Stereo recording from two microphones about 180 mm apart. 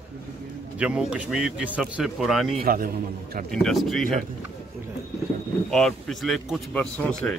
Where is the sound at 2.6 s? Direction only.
55° right (ahead or behind).